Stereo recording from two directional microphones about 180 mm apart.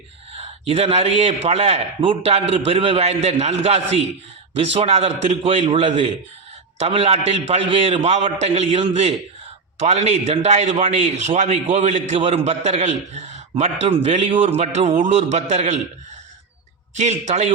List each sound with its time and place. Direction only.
0.3 s a man's voice: 35° right (ahead or behind)
4.5 s a man's voice: 35° right (ahead or behind)
17.0 s a man's voice: 40° right (ahead or behind)